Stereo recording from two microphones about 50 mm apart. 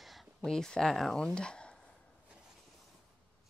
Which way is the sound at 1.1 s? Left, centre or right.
Centre.